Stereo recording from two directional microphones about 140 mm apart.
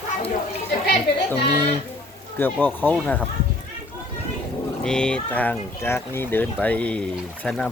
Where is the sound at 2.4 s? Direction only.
10° left (ahead or behind).